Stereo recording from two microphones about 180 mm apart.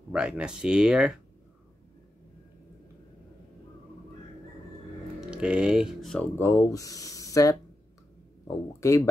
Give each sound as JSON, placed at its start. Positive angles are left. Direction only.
{"t": 0.1, "sound": "speech", "side_deg": -5}
{"t": 5.3, "sound": "speech", "side_deg": -5}
{"t": 6.3, "sound": "speech", "side_deg": 15}
{"t": 8.8, "sound": "speech", "side_deg": 15}